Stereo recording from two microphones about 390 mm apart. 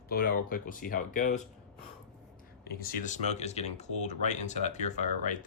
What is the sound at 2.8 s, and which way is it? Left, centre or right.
Speech, left.